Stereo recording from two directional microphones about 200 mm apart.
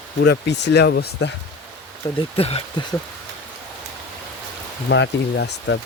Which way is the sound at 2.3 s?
30° left (ahead or behind).